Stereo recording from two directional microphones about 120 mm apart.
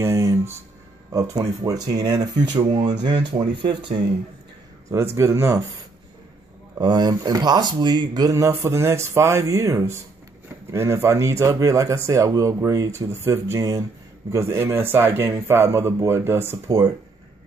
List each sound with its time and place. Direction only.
0.0 s speech: 25° right (ahead or behind)
2.6 s speech: 50° right (ahead or behind)
3.0 s speech: 35° right (ahead or behind)
4.8 s speech: 25° right (ahead or behind)
6.8 s speech: 35° right (ahead or behind)